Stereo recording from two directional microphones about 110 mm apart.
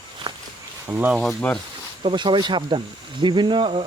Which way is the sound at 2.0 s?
45° right (ahead or behind).